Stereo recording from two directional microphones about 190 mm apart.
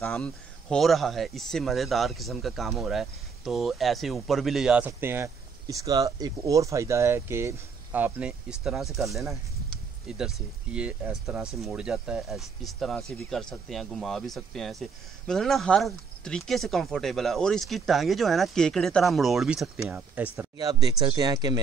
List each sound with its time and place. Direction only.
0.0 s speech: 5° left (ahead or behind)
20.3 s speech: 20° right (ahead or behind)